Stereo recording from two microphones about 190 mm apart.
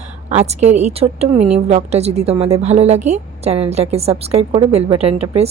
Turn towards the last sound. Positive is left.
turn(degrees=-30)  # may be behind; listen again after turning